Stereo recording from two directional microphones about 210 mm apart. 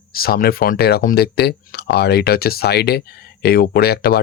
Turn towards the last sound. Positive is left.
turn(degrees=50)  # may be behind; listen again after turning